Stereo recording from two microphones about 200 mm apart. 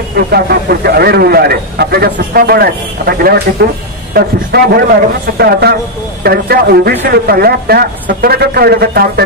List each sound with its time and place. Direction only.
0.1 s speech: 50° right (ahead or behind)